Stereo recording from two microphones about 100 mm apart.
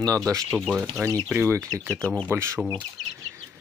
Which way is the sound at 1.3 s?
20° right (ahead or behind).